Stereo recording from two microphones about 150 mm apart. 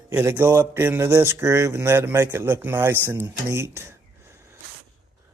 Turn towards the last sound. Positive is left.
turn(degrees=-20)  # may be behind; listen again after turning